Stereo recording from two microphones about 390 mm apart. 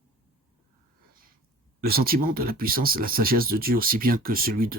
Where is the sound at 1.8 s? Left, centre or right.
Right.